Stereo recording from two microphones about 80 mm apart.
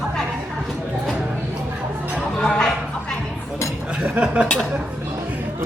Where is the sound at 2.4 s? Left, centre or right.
Centre.